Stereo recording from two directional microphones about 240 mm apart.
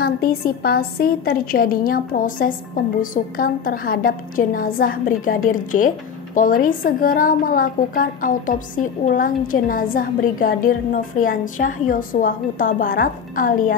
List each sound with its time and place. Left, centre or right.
0.0 s a woman's voice: left